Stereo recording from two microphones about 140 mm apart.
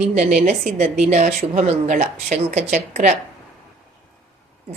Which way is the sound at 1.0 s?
70° right (ahead or behind).